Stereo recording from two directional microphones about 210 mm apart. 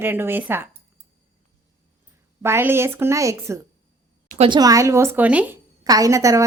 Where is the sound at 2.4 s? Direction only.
10° right (ahead or behind).